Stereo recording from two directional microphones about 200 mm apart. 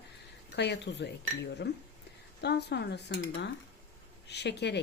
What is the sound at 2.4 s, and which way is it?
Speech, 55° left (ahead or behind).